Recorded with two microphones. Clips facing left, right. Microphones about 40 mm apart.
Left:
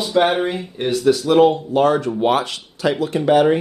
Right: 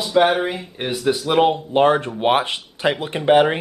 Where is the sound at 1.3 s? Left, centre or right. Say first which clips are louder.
Left 2 dB; right.